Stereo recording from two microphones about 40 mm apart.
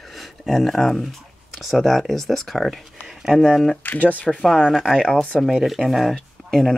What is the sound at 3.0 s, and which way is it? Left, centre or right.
Speech, centre.